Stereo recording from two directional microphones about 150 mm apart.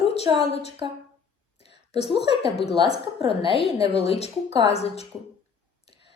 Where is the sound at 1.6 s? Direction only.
40° left (ahead or behind).